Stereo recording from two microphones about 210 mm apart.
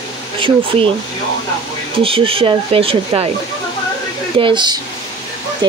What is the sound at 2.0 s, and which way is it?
Speech, 25° right (ahead or behind).